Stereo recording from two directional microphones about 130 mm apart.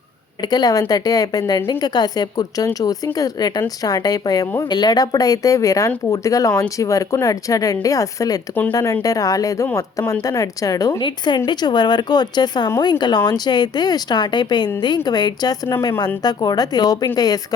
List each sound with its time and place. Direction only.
0.4 s speech: 30° left (ahead or behind)